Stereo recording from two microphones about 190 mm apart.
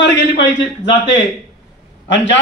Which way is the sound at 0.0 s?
70° left (ahead or behind).